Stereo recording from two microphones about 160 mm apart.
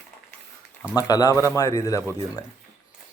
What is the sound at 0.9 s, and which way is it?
Speech, 25° left (ahead or behind).